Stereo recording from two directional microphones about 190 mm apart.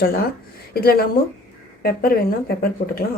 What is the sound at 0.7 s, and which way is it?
A woman's voice, 55° left (ahead or behind).